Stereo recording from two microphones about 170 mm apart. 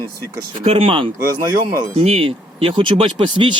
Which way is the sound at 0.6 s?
35° right (ahead or behind).